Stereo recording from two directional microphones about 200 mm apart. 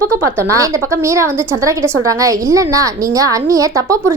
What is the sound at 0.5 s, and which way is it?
A woman's voice, 15° right (ahead or behind).